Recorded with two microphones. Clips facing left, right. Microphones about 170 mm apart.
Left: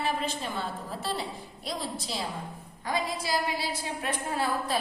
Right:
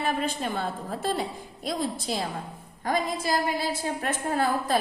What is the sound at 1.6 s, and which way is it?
A woman's voice, 50° right (ahead or behind).